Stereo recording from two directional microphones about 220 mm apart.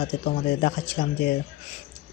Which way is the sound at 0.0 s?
40° left (ahead or behind).